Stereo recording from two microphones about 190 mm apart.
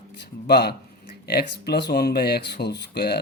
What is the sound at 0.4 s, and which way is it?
Speech, 60° left (ahead or behind).